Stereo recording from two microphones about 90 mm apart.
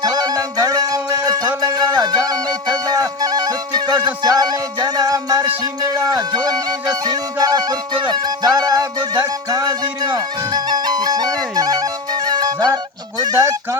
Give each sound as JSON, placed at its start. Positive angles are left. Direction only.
{"t": 0.0, "sound": "music", "side_deg": -45}